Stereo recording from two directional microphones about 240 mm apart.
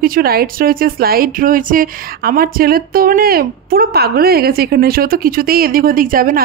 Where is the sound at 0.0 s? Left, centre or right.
Right.